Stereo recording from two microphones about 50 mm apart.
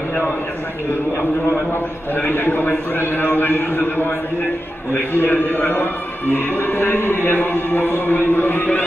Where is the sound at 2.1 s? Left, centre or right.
Left.